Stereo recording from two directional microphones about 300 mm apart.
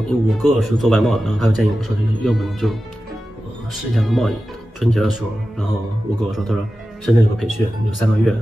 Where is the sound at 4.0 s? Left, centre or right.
Centre.